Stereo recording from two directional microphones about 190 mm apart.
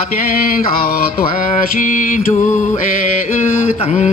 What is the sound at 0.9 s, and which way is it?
Music, 45° left (ahead or behind).